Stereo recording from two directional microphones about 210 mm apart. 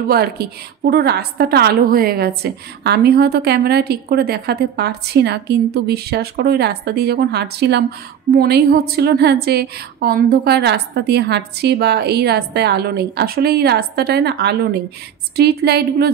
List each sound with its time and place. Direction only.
0.1 s a woman's voice: 45° right (ahead or behind)